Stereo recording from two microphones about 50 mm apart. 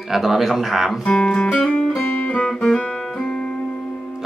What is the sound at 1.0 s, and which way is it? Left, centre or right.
Music, centre.